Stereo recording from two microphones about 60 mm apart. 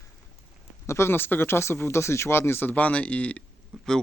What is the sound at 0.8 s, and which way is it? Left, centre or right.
Speech, left.